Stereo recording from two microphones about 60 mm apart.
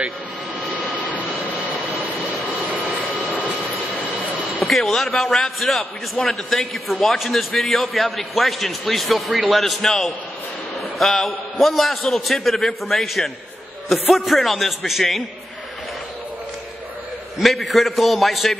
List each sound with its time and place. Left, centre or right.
1.0 s jet engine: left
2.6 s vehicle: right
4.6 s a man's voice: centre
17.4 s a man's voice: centre